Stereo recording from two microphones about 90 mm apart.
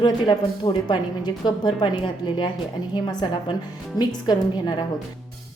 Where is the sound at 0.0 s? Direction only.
60° left (ahead or behind).